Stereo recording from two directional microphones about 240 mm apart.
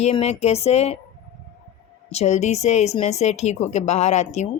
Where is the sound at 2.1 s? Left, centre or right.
Left.